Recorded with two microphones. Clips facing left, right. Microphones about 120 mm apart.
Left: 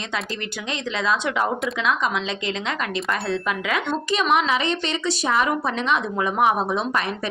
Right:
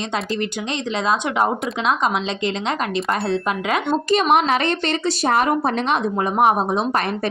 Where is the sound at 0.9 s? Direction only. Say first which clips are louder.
Right 3 dB; 25° right (ahead or behind).